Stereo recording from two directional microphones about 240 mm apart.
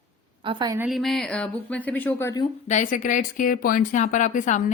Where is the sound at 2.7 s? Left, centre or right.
Left.